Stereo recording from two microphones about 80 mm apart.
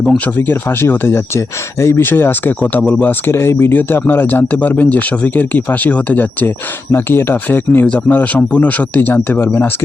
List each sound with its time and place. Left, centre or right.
0.3 s speech: left